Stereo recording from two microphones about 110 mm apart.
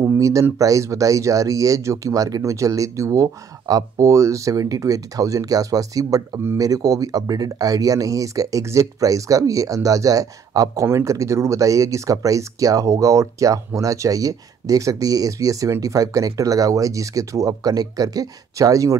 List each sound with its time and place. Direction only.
0.0 s speech: 25° right (ahead or behind)